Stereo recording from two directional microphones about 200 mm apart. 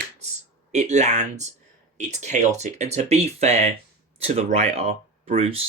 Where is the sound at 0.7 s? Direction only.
35° right (ahead or behind).